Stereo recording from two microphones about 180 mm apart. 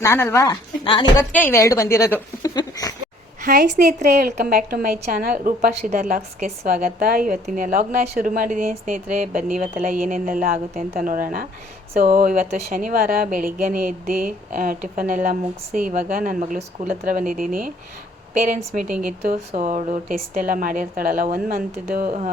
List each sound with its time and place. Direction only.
0.0 s speech: 15° left (ahead or behind)
1.3 s a woman's voice: 10° left (ahead or behind)
2.6 s goat: 20° left (ahead or behind)
3.4 s a woman's voice: 55° right (ahead or behind)